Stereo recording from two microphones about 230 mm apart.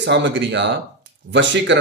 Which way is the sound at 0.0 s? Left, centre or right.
Right.